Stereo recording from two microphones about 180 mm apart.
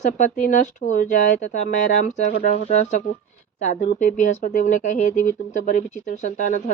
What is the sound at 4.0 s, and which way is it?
A woman's voice, 45° left (ahead or behind).